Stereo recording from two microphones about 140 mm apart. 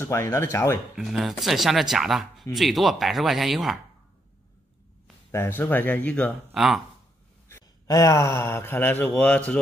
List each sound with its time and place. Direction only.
0.0 s speech: 20° left (ahead or behind)
0.9 s speech: centre (ahead or behind)
5.3 s speech: 15° left (ahead or behind)
6.5 s speech: centre (ahead or behind)
7.4 s speech: 20° left (ahead or behind)